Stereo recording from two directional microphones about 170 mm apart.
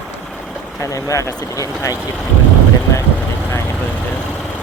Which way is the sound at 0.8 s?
20° left (ahead or behind).